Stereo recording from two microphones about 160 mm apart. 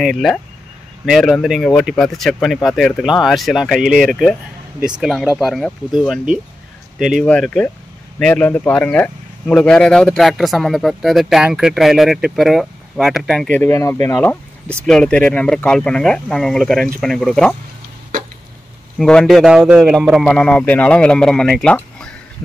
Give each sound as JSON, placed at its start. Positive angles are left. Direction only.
{"t": 0.0, "sound": "speech", "side_deg": 0}
{"t": 13.6, "sound": "speech", "side_deg": 15}
{"t": 18.9, "sound": "speech", "side_deg": 5}